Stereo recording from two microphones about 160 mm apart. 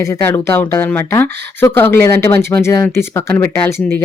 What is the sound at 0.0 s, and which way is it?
Speech, 15° left (ahead or behind).